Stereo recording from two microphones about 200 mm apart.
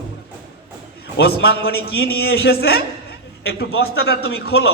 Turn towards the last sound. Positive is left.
turn(degrees=55)  # may be behind; listen again after turning